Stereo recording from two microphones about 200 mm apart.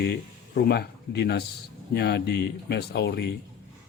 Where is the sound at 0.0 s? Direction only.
55° left (ahead or behind).